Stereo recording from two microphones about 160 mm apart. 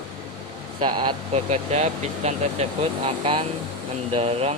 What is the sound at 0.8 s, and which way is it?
Speech, 30° right (ahead or behind).